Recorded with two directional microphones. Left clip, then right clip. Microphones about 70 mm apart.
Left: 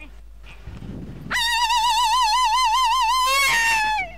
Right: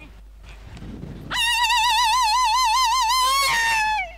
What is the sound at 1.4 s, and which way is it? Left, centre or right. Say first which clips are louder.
Music: right 1 dB; right.